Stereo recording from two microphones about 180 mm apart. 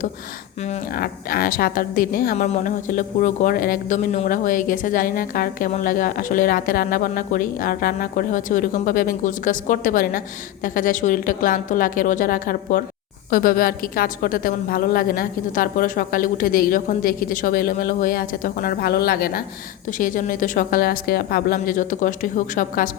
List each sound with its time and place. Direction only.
0.9 s speech: 55° left (ahead or behind)
20.0 s speech: 50° left (ahead or behind)